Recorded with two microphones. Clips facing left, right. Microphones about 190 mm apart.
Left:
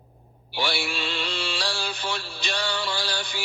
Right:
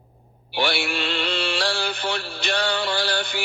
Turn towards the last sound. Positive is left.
turn(degrees=-60)  # may be behind; listen again after turning